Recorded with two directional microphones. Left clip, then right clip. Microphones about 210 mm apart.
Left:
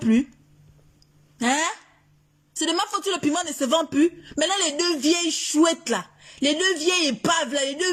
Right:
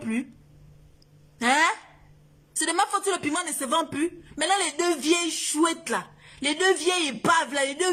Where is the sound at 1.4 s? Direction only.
15° left (ahead or behind).